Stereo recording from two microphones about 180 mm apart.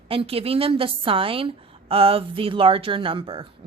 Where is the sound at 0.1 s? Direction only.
30° right (ahead or behind).